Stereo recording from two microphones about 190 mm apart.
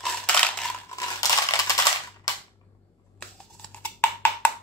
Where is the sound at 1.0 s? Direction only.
15° left (ahead or behind).